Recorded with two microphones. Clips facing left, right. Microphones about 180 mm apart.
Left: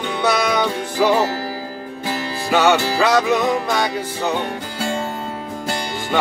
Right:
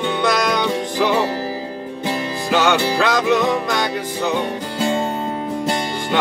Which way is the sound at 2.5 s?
5° left (ahead or behind).